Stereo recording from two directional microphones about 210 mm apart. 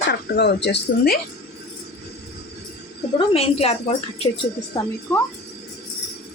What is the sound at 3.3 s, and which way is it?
A woman's voice, 30° left (ahead or behind).